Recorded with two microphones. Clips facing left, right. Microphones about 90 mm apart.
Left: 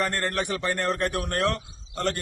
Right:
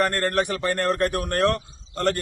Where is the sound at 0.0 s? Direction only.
50° right (ahead or behind).